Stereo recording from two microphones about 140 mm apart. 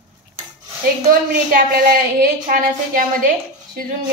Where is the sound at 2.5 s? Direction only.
75° right (ahead or behind).